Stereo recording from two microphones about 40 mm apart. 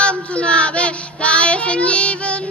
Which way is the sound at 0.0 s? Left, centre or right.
Left.